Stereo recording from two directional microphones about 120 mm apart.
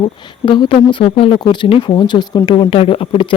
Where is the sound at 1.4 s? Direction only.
40° left (ahead or behind).